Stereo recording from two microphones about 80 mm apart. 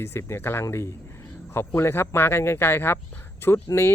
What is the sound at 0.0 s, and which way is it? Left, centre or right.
Speech, left.